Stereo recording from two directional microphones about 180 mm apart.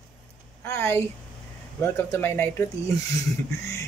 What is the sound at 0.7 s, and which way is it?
Speech, 15° left (ahead or behind).